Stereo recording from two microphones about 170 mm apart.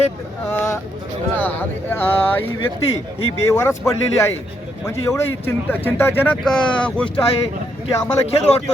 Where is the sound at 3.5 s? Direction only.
20° left (ahead or behind).